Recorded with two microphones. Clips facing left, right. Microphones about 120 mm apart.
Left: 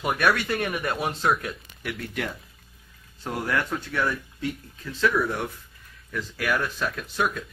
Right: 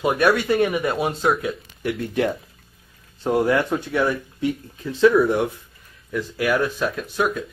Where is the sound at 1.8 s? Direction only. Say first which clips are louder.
Right 9 dB; 25° right (ahead or behind); by 7.4 s 5° right (ahead or behind).